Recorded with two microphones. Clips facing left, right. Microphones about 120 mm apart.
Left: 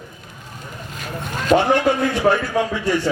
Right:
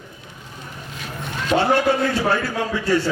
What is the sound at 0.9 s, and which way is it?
Vehicle, 45° left (ahead or behind).